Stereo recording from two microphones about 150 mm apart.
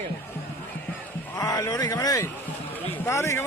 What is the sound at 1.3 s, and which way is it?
A man's voice, 25° left (ahead or behind).